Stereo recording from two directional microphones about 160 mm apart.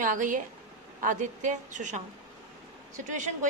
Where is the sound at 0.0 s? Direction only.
55° right (ahead or behind).